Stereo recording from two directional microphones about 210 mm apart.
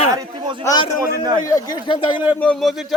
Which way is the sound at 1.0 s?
15° right (ahead or behind).